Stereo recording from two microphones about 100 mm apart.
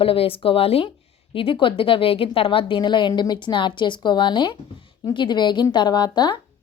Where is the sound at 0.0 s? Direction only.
65° left (ahead or behind).